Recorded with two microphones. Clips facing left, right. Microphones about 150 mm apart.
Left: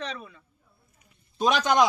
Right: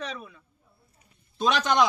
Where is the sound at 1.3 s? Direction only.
10° left (ahead or behind).